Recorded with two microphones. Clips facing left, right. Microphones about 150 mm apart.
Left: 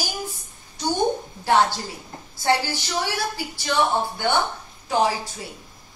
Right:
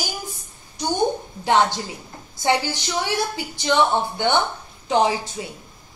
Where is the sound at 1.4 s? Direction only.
20° right (ahead or behind).